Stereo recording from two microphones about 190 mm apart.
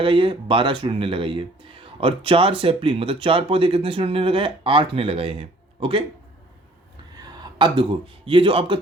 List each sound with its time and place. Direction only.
0.0 s speech: 25° right (ahead or behind)
7.2 s speech: 25° right (ahead or behind)